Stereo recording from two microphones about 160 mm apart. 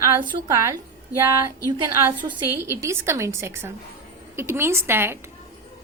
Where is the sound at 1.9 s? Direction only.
20° right (ahead or behind).